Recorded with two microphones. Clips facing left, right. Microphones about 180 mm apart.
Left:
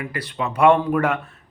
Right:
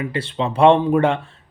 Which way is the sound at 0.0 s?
25° right (ahead or behind).